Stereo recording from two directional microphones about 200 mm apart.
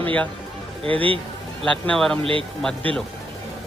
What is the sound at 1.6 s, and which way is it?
Speech, 5° left (ahead or behind).